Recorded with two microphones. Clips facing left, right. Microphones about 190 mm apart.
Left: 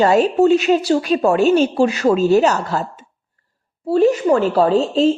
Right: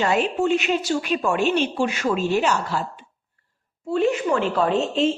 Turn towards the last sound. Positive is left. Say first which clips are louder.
# left 6 dB
turn(degrees=35)  # may be behind; listen again after turning